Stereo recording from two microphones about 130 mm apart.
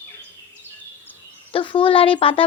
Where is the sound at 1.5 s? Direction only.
40° left (ahead or behind).